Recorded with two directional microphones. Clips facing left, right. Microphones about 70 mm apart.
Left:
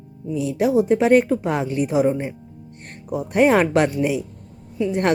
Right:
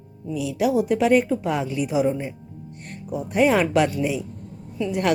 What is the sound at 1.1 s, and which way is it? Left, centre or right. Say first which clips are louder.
A woman's voice: left 3 dB; left.